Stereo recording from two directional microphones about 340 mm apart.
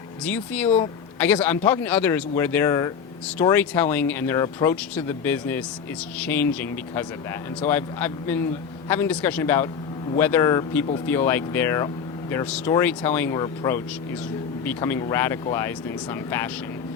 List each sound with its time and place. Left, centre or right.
0.3 s speech: centre